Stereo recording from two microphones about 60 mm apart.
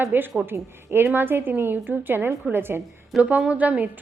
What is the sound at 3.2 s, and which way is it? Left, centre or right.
Speech, right.